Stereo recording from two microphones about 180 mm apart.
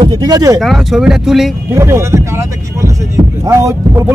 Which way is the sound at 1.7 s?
15° right (ahead or behind).